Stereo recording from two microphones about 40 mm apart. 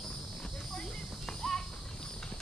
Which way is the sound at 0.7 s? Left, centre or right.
Centre.